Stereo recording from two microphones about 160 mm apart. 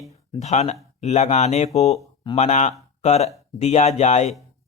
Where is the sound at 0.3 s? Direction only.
45° left (ahead or behind).